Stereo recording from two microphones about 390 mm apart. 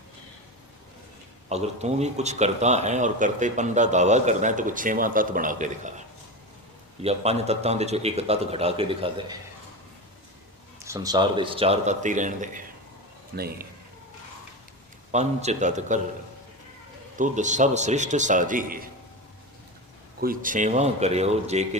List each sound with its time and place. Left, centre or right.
1.5 s a man's voice: centre
7.0 s a man's voice: centre
10.8 s a man's voice: centre
15.1 s a man's voice: centre
17.2 s a man's voice: centre
20.2 s a man's voice: right